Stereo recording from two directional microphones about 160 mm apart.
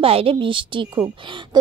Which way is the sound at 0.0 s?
35° right (ahead or behind).